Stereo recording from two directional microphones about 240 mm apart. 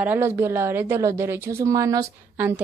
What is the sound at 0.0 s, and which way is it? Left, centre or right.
A woman's voice, centre.